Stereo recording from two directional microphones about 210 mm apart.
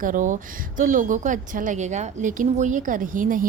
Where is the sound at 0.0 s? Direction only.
40° right (ahead or behind).